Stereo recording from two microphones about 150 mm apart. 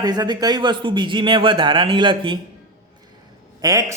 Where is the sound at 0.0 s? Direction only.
25° right (ahead or behind).